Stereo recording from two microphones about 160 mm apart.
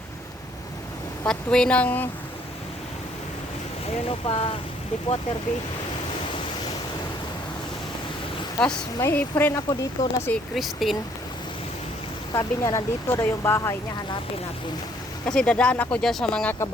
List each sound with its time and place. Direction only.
1.2 s speech: 5° left (ahead or behind)
3.8 s speech: 35° left (ahead or behind)
9.0 s speech: 15° left (ahead or behind)
10.3 s speech: centre (ahead or behind)
12.3 s speech: 20° left (ahead or behind)
15.3 s speech: 5° left (ahead or behind)